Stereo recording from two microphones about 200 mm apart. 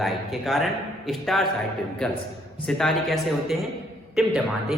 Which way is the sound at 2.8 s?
Centre (ahead or behind).